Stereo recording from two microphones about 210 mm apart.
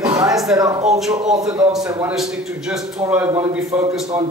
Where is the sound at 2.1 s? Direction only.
5° right (ahead or behind).